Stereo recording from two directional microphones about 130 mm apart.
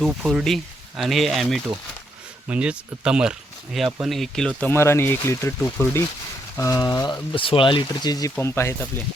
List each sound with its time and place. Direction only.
0.0 s speech: 5° right (ahead or behind); by 8.9 s 20° left (ahead or behind)